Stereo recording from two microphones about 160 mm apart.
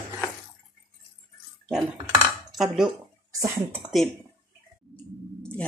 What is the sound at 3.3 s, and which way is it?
Speech, 15° right (ahead or behind).